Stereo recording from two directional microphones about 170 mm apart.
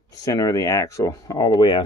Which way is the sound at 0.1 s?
20° left (ahead or behind).